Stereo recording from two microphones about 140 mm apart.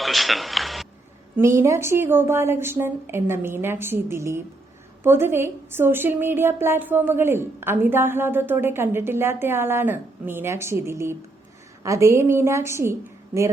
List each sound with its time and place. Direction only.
0.0 s music: centre (ahead or behind)
1.4 s a woman's voice: 20° right (ahead or behind)